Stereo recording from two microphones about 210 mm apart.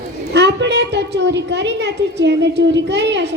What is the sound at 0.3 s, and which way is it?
A woman's voice, 55° right (ahead or behind).